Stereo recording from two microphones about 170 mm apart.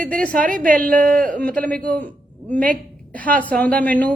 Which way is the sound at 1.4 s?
10° left (ahead or behind).